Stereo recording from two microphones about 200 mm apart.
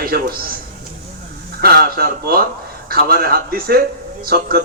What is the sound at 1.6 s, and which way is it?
Speech, 50° right (ahead or behind).